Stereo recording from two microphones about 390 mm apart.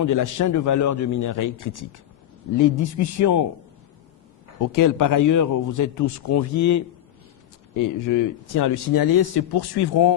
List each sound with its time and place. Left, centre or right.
0.0 s a man's voice: left
4.6 s a man's voice: left
8.8 s speech: left